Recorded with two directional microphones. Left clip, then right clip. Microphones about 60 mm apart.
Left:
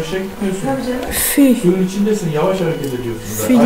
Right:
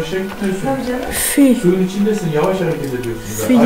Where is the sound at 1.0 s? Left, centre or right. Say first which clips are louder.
Even; centre.